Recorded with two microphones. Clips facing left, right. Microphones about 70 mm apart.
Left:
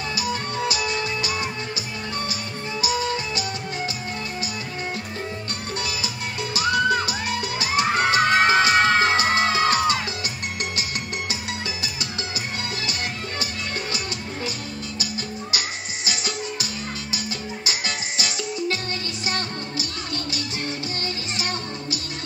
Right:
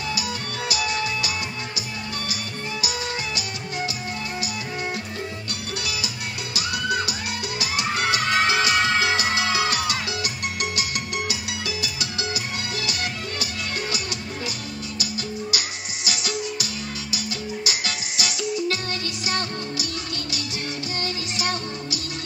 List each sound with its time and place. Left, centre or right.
0.1 s music: left
2.8 s music: left
6.5 s music: left
16.1 s music: left
17.6 s music: left
21.4 s music: left